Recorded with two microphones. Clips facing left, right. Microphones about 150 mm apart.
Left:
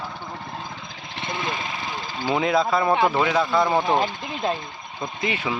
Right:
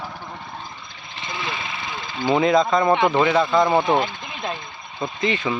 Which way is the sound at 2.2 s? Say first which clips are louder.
Right 4 dB; 5° left (ahead or behind).